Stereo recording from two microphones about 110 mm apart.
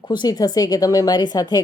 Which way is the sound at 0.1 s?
40° left (ahead or behind).